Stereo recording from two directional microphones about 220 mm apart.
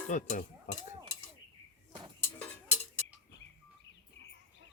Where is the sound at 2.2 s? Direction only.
10° left (ahead or behind).